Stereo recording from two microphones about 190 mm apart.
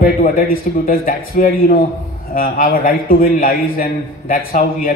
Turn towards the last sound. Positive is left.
turn(degrees=45)  # may be behind; listen again after turning